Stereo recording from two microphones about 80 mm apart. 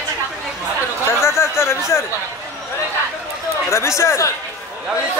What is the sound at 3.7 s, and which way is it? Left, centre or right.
Speech, left.